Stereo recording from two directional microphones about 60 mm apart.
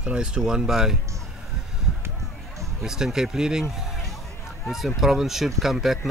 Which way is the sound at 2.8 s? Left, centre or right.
Centre.